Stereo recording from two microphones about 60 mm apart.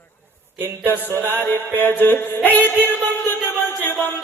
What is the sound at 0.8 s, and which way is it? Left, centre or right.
Music, left.